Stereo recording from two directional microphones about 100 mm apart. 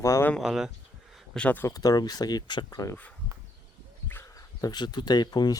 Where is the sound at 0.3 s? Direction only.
5° right (ahead or behind).